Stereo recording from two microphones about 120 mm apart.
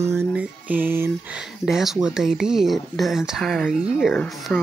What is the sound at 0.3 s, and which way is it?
Music, 10° right (ahead or behind).